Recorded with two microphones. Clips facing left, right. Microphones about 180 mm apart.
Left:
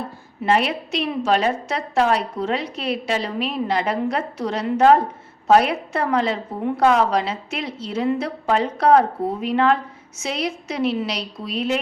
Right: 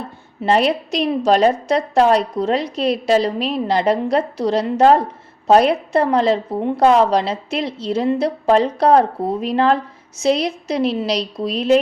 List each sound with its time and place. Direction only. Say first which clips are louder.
0.4 s a woman's voice: right 4 dB; 35° right (ahead or behind)